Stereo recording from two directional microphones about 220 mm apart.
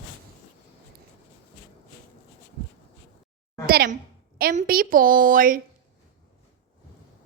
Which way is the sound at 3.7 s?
45° right (ahead or behind).